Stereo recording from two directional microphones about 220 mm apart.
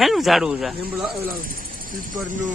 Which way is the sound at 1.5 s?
40° right (ahead or behind).